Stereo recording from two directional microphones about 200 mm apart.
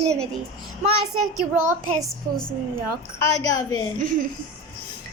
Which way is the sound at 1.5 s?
15° right (ahead or behind).